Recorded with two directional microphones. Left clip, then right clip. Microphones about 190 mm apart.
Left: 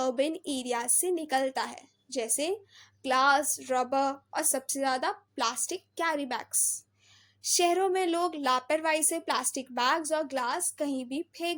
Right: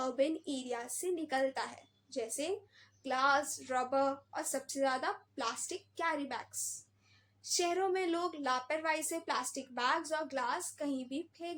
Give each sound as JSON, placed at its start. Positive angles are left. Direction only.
{"t": 0.0, "sound": "a woman's voice", "side_deg": 40}